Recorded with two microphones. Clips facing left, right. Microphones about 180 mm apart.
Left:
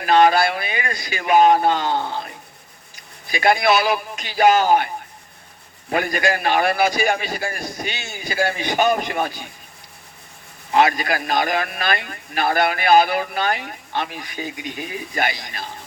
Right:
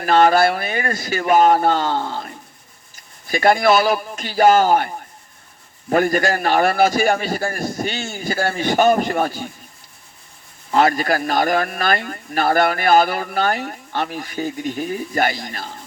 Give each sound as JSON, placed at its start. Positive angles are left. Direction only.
{"t": 0.0, "sound": "speech", "side_deg": -45}
{"t": 2.9, "sound": "speech", "side_deg": -45}
{"t": 5.9, "sound": "speech", "side_deg": -45}
{"t": 10.8, "sound": "speech", "side_deg": -45}